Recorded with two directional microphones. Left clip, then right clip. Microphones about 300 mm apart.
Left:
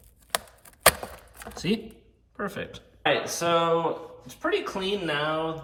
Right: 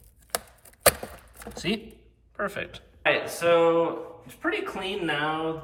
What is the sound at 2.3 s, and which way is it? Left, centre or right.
Speech, centre.